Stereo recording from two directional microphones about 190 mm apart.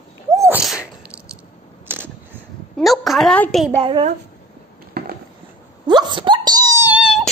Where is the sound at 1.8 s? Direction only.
10° right (ahead or behind).